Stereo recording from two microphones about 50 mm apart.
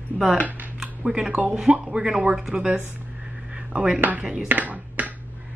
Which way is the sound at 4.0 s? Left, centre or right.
Right.